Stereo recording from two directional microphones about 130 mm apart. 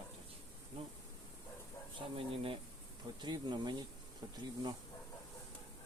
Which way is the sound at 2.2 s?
45° right (ahead or behind).